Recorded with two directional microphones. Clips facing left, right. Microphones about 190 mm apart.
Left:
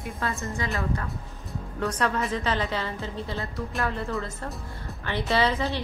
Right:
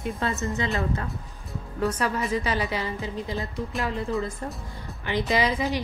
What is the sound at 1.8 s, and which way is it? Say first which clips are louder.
A woman's voice: right 1 dB; 5° right (ahead or behind).